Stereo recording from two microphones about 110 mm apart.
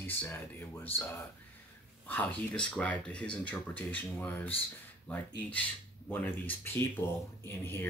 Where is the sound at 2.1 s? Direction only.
15° left (ahead or behind).